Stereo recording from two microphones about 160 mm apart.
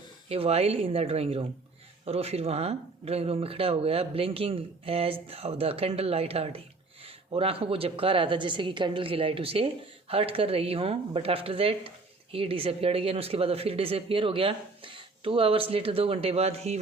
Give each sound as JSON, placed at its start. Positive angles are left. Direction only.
{"t": 0.3, "sound": "speech", "side_deg": -40}